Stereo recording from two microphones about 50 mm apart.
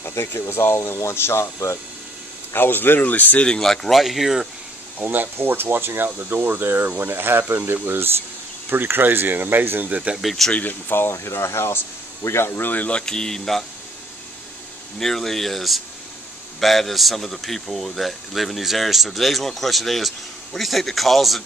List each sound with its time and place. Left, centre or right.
0.0 s speech: left
2.5 s speech: left
3.4 s speech: centre
4.0 s a man's voice: centre
4.9 s speech: right
10.1 s a man's voice: centre
10.5 s speech: left
11.0 s speech: left
12.7 s speech: left
13.0 s speech: centre
15.0 s a man's voice: centre